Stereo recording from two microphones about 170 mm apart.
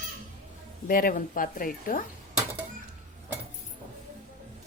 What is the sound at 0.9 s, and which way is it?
Speech, 55° left (ahead or behind).